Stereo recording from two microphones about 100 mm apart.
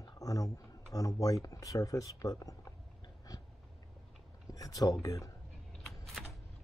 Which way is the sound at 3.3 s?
35° left (ahead or behind).